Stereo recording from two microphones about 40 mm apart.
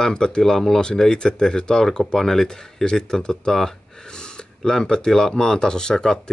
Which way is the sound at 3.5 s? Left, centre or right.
Centre.